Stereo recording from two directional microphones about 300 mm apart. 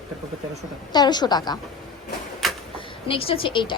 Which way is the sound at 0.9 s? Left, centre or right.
Centre.